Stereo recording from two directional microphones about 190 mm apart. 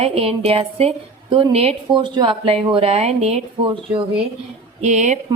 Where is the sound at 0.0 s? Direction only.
30° right (ahead or behind).